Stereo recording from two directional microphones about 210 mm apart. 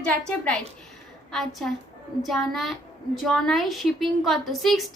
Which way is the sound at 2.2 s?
Centre (ahead or behind).